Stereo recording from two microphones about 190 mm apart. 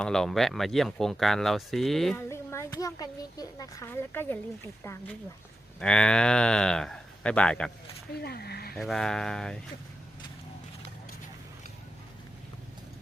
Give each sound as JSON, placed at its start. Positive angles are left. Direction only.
{"t": 0.0, "sound": "speech", "side_deg": 5}
{"t": 2.3, "sound": "speech", "side_deg": 15}
{"t": 8.2, "sound": "speech", "side_deg": 55}
{"t": 8.7, "sound": "speech", "side_deg": 0}